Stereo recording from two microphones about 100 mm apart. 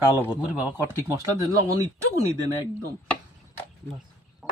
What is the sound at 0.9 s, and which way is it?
Speech, 30° right (ahead or behind).